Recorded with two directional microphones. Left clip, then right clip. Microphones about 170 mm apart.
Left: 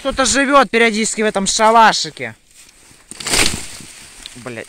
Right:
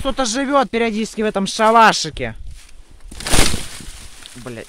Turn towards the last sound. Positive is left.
turn(degrees=-5)  # may be behind; listen again after turning